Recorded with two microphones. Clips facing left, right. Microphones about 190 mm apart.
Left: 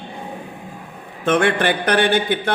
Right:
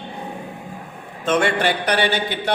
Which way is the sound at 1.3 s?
55° left (ahead or behind).